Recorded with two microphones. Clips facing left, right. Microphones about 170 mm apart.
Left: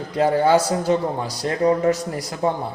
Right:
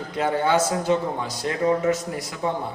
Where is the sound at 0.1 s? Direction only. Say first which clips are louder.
Left 5 dB; 35° left (ahead or behind).